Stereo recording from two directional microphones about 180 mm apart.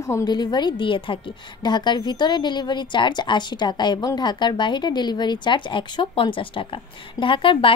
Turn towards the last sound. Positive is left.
turn(degrees=30)  # may be behind; listen again after turning